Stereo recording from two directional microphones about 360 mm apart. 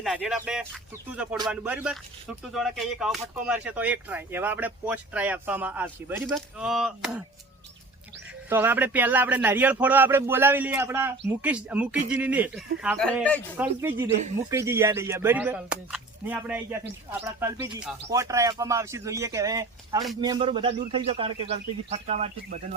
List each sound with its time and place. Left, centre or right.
0.0 s speech: centre
8.4 s speech: centre